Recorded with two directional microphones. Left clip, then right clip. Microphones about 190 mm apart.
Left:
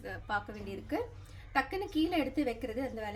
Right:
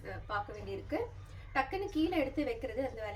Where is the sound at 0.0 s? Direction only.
65° left (ahead or behind).